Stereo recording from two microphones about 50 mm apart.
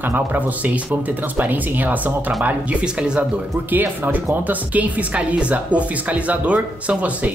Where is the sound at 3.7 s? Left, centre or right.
Right.